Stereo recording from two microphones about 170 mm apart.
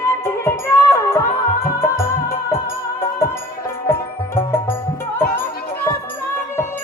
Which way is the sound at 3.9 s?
15° left (ahead or behind).